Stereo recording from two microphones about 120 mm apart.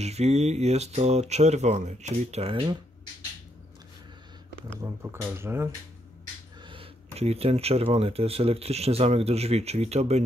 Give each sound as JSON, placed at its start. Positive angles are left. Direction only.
{"t": 0.0, "sound": "speech", "side_deg": -65}
{"t": 2.4, "sound": "speech", "side_deg": -50}
{"t": 5.1, "sound": "speech", "side_deg": -20}
{"t": 6.6, "sound": "a sound", "side_deg": -45}
{"t": 7.2, "sound": "speech", "side_deg": -55}